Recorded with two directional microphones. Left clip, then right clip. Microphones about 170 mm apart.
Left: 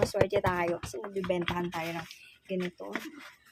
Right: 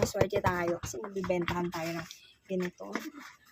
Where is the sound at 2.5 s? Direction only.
40° right (ahead or behind).